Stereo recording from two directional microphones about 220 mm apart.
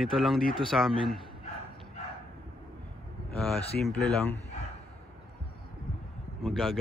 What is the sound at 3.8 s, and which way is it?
Speech, centre (ahead or behind).